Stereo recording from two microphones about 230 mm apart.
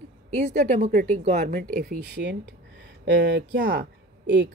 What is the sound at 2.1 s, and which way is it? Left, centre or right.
Speech, right.